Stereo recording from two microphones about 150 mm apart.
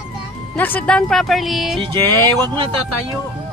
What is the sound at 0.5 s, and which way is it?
Speech, 10° left (ahead or behind).